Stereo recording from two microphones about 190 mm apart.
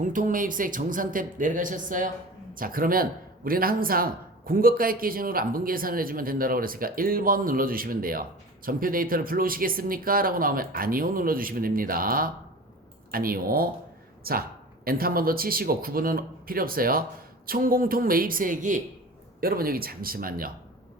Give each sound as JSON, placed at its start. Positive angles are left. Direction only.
{"t": 0.0, "sound": "speech", "side_deg": -45}